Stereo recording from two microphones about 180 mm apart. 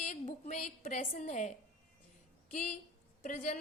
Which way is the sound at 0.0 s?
40° left (ahead or behind).